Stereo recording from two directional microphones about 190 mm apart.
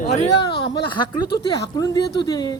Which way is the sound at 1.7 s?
20° left (ahead or behind).